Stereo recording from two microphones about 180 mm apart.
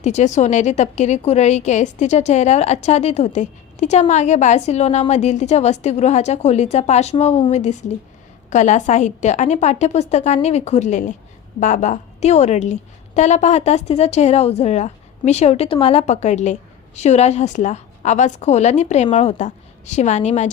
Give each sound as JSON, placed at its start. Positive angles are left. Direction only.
{"t": 0.0, "sound": "a woman's voice", "side_deg": 40}